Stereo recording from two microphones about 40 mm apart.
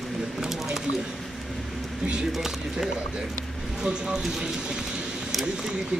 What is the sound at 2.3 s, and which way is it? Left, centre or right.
Speech, centre.